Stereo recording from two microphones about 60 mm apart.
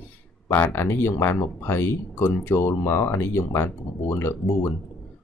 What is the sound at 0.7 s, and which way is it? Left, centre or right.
Speech, left.